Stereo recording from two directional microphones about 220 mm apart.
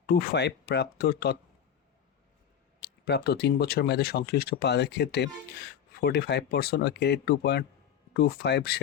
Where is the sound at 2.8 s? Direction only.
50° left (ahead or behind).